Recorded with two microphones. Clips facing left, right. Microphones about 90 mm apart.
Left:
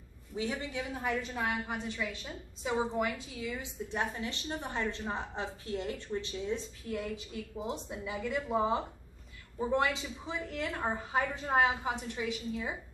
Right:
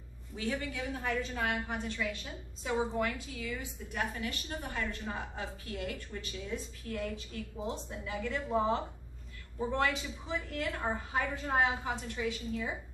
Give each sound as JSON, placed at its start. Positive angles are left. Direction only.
{"t": 0.4, "sound": "a woman's voice", "side_deg": 20}